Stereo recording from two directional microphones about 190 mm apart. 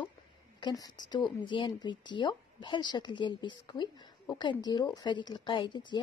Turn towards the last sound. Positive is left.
turn(degrees=25)  # may be behind; listen again after turning